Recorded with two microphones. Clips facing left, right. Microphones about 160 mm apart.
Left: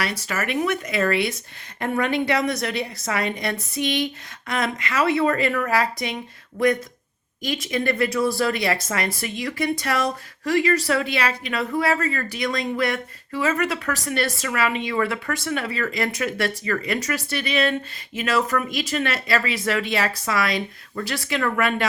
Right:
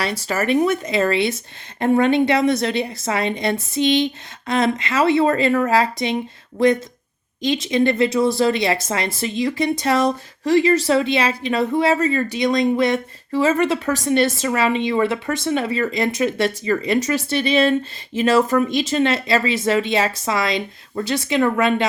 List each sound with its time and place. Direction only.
0.0 s speech: 30° right (ahead or behind)
7.4 s speech: 25° right (ahead or behind)